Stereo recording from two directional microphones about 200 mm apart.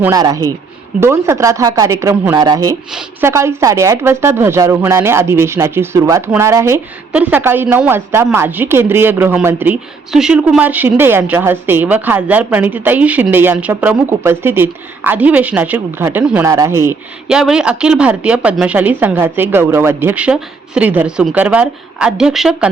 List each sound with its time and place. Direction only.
0.0 s speech: 15° right (ahead or behind)
17.2 s speech: 5° right (ahead or behind)